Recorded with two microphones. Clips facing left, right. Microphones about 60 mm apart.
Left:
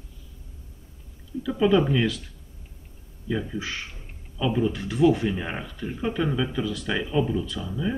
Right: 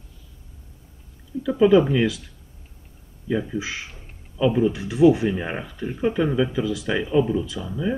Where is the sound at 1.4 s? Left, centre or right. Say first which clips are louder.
Right 5 dB; centre.